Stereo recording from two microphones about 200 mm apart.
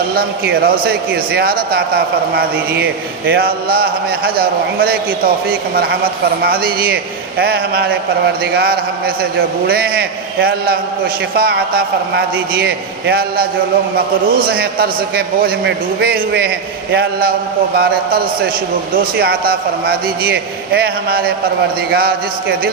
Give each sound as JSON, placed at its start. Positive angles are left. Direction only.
{"t": 0.2, "sound": "a man's voice", "side_deg": -50}